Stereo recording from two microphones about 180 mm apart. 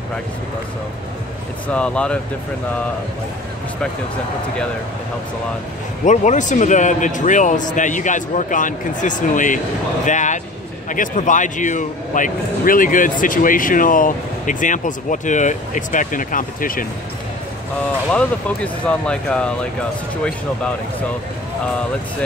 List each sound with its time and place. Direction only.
1.7 s speech: 5° left (ahead or behind)
6.0 s a man's voice: 45° left (ahead or behind)
18.1 s speech: 5° left (ahead or behind)